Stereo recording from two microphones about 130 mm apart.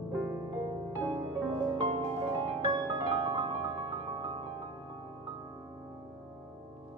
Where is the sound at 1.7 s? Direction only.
40° right (ahead or behind).